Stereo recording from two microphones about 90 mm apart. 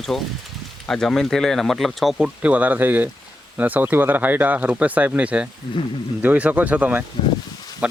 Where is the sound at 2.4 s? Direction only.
15° right (ahead or behind).